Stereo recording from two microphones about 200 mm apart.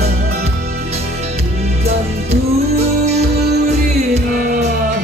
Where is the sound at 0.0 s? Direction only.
30° right (ahead or behind).